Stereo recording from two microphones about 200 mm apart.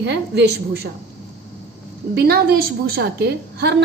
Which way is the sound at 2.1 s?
50° right (ahead or behind).